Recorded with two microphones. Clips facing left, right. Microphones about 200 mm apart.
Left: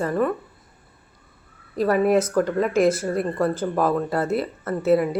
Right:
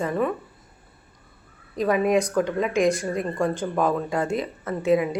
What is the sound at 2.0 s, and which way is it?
A woman's voice, 5° left (ahead or behind).